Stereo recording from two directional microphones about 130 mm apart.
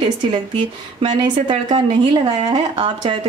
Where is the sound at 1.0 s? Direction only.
35° right (ahead or behind).